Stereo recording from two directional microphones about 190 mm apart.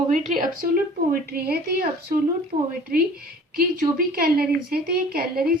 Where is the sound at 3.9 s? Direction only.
55° right (ahead or behind).